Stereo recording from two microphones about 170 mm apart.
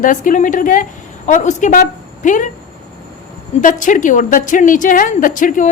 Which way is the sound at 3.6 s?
50° left (ahead or behind).